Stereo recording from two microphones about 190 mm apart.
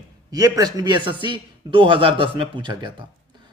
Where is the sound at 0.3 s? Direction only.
20° right (ahead or behind).